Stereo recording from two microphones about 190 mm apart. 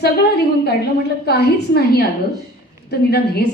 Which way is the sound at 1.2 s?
60° left (ahead or behind).